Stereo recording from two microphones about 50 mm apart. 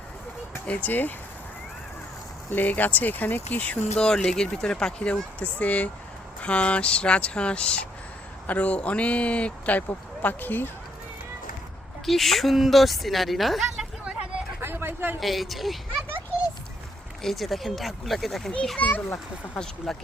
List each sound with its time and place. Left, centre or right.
0.7 s speech: left
2.5 s speech: left
3.9 s speech: centre; by 9.8 s left
10.2 s speech: left
12.0 s a woman's voice: centre
14.6 s a sound: right
15.2 s a woman's voice: centre
17.2 s a woman's voice: centre
18.8 s speech: left
19.9 s speech: centre